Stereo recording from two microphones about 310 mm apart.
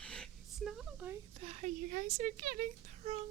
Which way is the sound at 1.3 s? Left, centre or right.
Centre.